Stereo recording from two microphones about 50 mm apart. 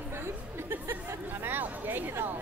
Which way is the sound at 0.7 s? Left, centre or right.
Right.